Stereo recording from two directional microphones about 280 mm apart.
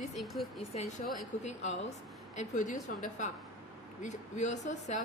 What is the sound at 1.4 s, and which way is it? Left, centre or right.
A woman's voice, left.